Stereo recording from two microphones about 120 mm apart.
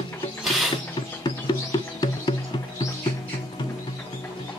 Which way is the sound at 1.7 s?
35° left (ahead or behind).